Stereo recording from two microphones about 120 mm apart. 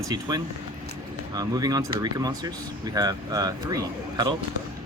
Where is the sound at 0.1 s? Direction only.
30° right (ahead or behind).